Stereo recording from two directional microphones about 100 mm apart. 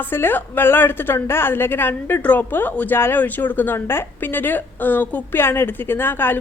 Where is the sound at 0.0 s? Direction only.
20° left (ahead or behind).